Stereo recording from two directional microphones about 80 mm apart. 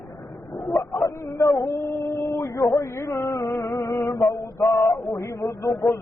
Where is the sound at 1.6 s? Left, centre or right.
Left.